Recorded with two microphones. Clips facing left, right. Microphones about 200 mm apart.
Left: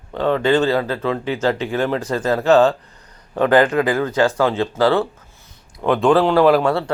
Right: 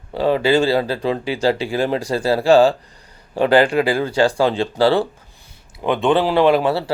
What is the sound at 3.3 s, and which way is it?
Speech, 30° right (ahead or behind).